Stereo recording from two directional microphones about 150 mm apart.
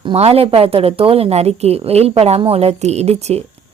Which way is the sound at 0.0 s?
40° right (ahead or behind).